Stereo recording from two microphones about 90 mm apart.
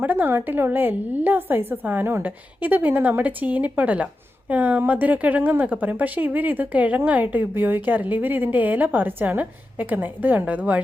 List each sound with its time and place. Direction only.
0.0 s a woman's voice: 20° right (ahead or behind)